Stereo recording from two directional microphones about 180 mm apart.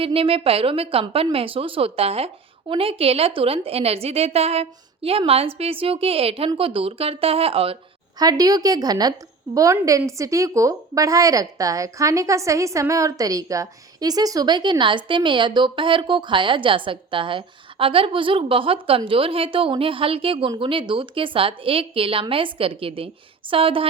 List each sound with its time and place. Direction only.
0.0 s a woman's voice: 30° right (ahead or behind)
8.2 s a woman's voice: 20° right (ahead or behind)